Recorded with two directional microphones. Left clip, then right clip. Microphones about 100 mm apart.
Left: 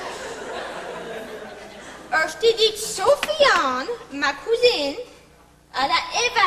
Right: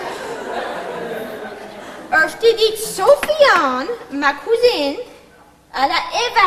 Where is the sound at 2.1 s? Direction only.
45° left (ahead or behind).